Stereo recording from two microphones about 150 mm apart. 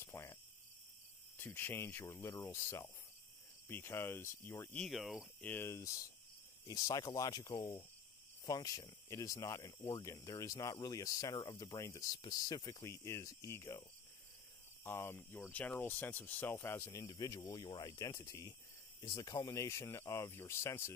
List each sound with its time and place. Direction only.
0.0 s cricket: 20° left (ahead or behind)
1.4 s speech: 15° left (ahead or behind); by 5.3 s centre (ahead or behind)
5.4 s speech: 15° left (ahead or behind)